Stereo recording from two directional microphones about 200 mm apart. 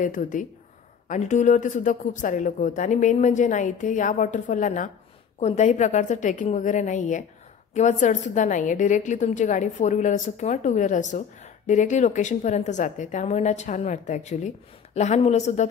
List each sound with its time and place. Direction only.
0.0 s a woman's voice: 40° left (ahead or behind)